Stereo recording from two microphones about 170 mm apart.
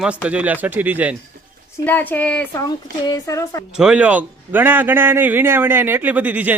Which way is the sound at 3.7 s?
5° right (ahead or behind).